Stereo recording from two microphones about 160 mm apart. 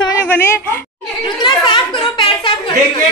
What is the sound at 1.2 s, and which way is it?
Speech, 30° left (ahead or behind).